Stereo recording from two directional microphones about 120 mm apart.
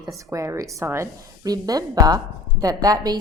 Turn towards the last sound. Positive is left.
turn(degrees=-35)  # may be behind; listen again after turning